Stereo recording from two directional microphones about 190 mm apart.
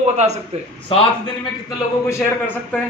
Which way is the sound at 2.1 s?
10° left (ahead or behind).